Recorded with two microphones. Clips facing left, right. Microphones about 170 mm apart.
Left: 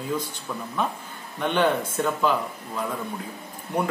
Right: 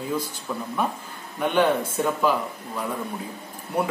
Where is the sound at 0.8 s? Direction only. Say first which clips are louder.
Right 1 dB; 10° right (ahead or behind).